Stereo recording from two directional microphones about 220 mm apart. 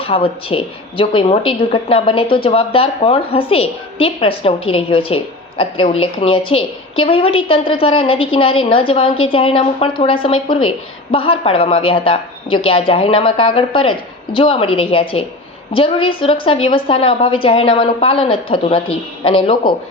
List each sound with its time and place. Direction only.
0.0 s a woman's voice: 25° left (ahead or behind)